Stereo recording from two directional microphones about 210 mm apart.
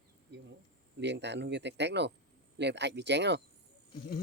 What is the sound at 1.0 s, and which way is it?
Speech, 55° right (ahead or behind).